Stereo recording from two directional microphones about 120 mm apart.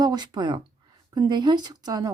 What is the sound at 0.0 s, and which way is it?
Speech, 35° right (ahead or behind).